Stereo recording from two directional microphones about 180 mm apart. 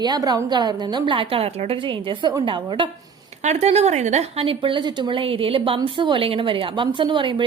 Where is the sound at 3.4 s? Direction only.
40° right (ahead or behind).